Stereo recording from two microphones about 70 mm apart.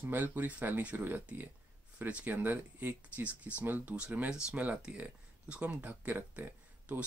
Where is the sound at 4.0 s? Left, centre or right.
Centre.